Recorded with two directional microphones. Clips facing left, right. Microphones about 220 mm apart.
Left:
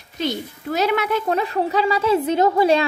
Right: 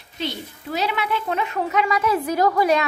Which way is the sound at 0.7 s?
45° left (ahead or behind).